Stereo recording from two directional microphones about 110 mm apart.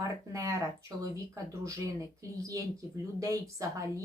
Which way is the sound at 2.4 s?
30° right (ahead or behind).